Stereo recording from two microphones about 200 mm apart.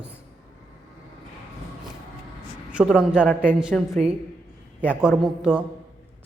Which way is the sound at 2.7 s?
5° right (ahead or behind).